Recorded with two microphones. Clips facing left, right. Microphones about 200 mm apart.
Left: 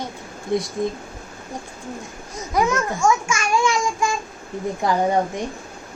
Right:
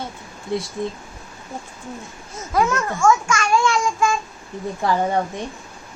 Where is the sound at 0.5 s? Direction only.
20° left (ahead or behind).